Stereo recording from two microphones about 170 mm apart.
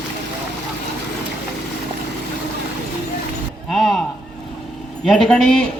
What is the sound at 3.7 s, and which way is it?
Speech, centre (ahead or behind).